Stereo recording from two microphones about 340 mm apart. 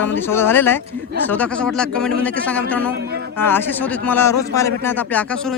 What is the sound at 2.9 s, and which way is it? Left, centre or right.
Speech, right.